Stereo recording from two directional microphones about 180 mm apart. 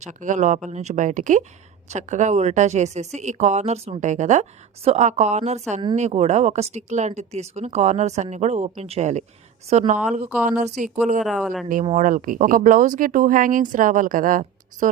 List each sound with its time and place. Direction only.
0.0 s a woman's voice: 45° right (ahead or behind)
11.2 s speech: centre (ahead or behind)
11.9 s speech: 45° right (ahead or behind)